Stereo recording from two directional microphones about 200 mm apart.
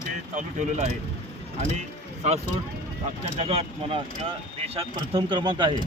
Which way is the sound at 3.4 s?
30° right (ahead or behind).